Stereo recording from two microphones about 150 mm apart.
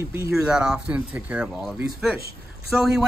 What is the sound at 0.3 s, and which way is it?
A man's voice, 5° right (ahead or behind).